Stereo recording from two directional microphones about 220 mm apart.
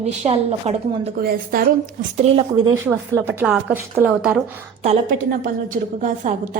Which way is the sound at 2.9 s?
10° right (ahead or behind).